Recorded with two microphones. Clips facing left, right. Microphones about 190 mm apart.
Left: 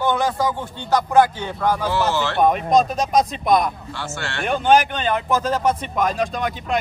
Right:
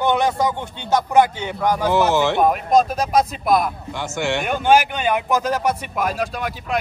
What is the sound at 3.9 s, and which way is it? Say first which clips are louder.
Speech: right 6 dB; 15° right (ahead or behind).